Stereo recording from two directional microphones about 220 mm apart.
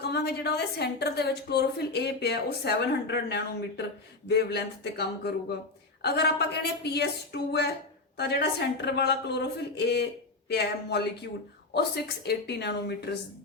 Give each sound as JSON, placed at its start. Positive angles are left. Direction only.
{"t": 0.0, "sound": "a woman's voice", "side_deg": 50}